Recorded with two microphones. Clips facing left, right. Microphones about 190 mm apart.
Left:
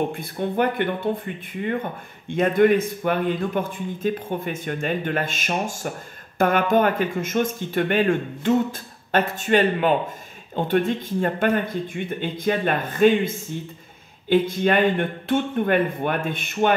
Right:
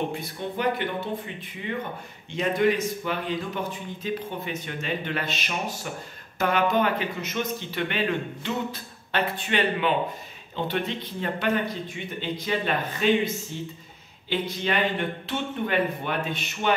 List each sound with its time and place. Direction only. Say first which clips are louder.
0.1 s a man's voice: left 5 dB; 55° left (ahead or behind)